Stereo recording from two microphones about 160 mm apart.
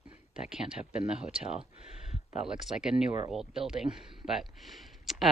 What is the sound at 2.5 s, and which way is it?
Speech, 5° right (ahead or behind).